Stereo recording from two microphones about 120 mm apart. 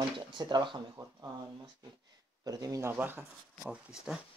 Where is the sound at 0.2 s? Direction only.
35° right (ahead or behind).